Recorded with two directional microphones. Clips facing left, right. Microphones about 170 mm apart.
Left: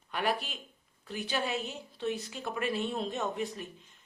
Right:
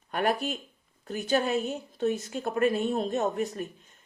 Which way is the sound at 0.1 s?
45° right (ahead or behind).